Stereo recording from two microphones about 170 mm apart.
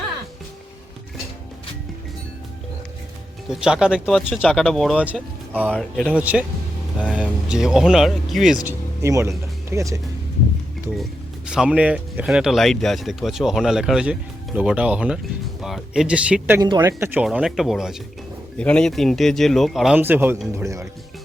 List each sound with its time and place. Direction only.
3.5 s speech: 5° right (ahead or behind)
5.0 s speech: 10° right (ahead or behind)
8.6 s speech: 15° right (ahead or behind)
10.9 s speech: centre (ahead or behind)
16.6 s speech: 20° right (ahead or behind)
17.2 s speech: centre (ahead or behind)
20.0 s speech: 10° right (ahead or behind)